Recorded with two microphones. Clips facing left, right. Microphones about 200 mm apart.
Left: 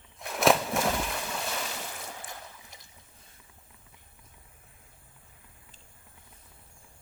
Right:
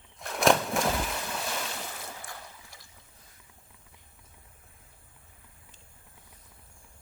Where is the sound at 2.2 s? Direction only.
20° left (ahead or behind).